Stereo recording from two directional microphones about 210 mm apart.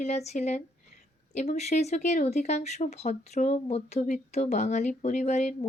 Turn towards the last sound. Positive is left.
turn(degrees=35)  # may be behind; listen again after turning